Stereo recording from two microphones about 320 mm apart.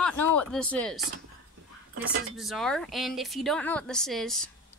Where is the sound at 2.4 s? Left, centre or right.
Centre.